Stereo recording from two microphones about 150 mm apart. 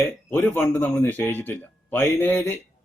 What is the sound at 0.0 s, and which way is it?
A man's voice, 15° left (ahead or behind).